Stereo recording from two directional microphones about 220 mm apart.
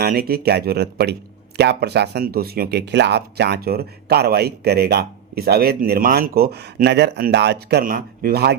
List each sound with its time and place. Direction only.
0.0 s speech: 45° right (ahead or behind)